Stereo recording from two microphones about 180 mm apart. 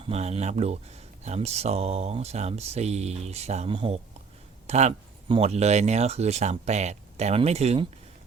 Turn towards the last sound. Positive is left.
turn(degrees=-35)  # may be behind; listen again after turning